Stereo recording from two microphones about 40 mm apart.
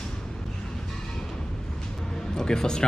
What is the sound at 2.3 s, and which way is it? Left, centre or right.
Speech, centre.